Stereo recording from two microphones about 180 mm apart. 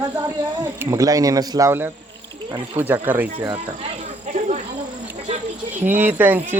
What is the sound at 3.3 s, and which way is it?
Speech, 30° right (ahead or behind).